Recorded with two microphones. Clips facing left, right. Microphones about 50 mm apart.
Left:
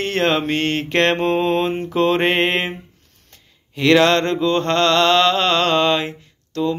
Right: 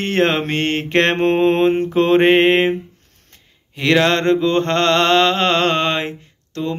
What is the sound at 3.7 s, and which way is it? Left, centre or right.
Mantra, centre.